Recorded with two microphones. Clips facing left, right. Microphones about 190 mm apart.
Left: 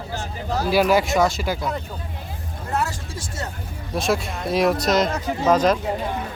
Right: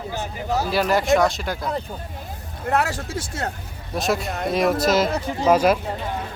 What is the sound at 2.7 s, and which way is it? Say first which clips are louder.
Speech: right 4 dB; 65° right (ahead or behind).